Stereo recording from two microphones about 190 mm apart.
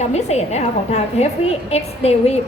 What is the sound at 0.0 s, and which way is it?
A woman's voice, 35° left (ahead or behind).